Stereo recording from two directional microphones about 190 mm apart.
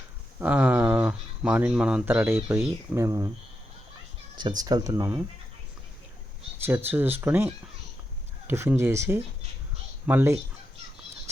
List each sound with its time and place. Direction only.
0.3 s speech: 5° right (ahead or behind)
4.4 s speech: 20° right (ahead or behind)
6.6 s speech: 10° right (ahead or behind)